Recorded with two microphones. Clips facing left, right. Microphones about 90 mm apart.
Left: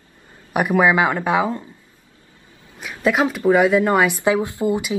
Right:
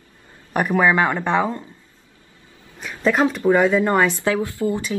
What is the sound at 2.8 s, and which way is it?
A woman's voice, 10° left (ahead or behind).